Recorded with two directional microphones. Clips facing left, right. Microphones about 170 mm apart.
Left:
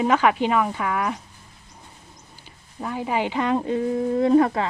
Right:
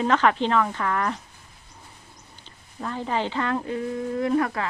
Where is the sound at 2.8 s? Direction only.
10° left (ahead or behind).